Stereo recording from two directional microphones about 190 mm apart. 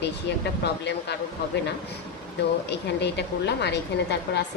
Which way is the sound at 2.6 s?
65° left (ahead or behind).